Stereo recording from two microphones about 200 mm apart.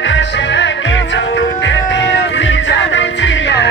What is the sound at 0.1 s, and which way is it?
Music, 65° left (ahead or behind).